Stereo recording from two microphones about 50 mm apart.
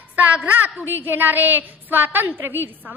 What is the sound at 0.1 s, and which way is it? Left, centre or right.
A woman's voice, right.